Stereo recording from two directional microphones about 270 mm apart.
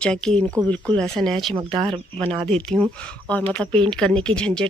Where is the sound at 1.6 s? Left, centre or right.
Centre.